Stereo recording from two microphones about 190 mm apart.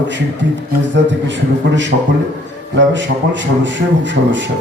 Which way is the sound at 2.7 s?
75° right (ahead or behind).